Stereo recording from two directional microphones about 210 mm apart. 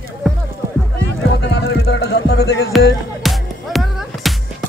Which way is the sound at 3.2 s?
Centre (ahead or behind).